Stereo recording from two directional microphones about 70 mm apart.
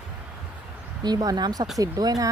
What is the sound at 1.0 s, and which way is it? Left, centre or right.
Speech, right.